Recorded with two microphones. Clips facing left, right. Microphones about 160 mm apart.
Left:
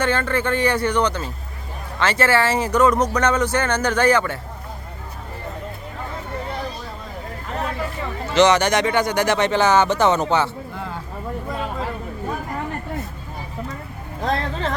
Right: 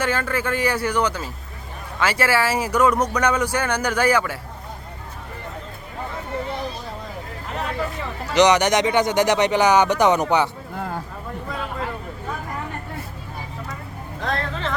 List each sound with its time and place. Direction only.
0.0 s speech: 5° right (ahead or behind)
8.3 s speech: 15° right (ahead or behind)
10.8 s a sound: 45° right (ahead or behind)
14.2 s music: 35° left (ahead or behind)